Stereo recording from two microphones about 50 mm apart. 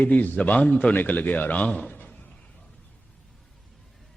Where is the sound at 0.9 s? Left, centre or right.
Left.